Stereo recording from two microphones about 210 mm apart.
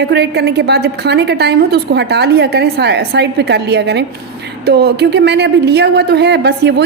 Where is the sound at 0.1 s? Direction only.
50° right (ahead or behind).